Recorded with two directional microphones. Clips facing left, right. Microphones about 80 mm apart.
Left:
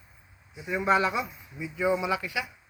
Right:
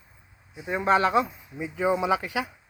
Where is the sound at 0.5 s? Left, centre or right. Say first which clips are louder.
Right 2 dB; right.